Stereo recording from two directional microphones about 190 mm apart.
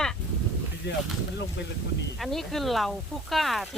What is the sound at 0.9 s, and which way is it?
Speech, 65° left (ahead or behind).